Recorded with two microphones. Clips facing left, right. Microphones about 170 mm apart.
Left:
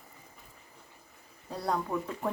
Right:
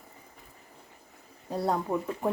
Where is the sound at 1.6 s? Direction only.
25° right (ahead or behind).